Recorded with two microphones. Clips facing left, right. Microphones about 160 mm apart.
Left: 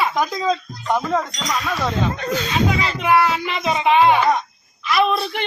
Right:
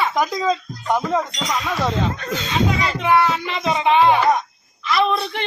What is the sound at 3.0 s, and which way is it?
Music, 5° left (ahead or behind).